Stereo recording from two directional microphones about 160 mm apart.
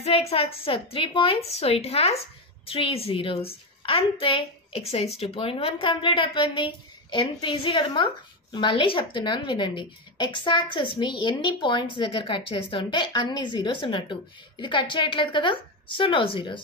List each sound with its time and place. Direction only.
0.0 s a woman's voice: 40° left (ahead or behind)